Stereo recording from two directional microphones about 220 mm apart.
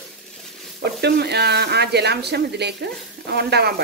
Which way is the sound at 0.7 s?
45° right (ahead or behind).